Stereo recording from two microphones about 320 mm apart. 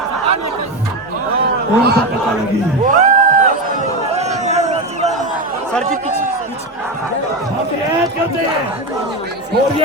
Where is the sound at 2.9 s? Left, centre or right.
Right.